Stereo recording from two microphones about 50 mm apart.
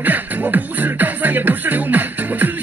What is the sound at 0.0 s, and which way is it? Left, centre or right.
Music, right.